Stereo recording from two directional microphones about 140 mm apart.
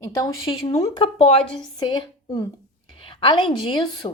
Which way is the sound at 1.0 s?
40° left (ahead or behind).